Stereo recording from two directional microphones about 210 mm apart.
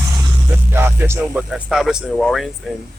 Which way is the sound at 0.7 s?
10° right (ahead or behind).